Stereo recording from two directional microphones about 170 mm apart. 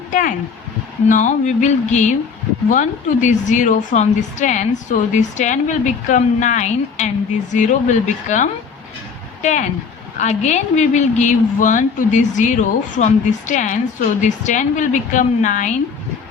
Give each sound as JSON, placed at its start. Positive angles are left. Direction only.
{"t": 0.1, "sound": "a woman's voice", "side_deg": 50}